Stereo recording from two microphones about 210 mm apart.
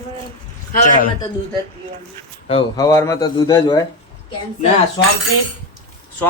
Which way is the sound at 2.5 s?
20° left (ahead or behind).